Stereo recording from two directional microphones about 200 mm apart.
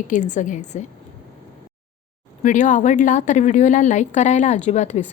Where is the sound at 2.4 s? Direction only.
40° left (ahead or behind).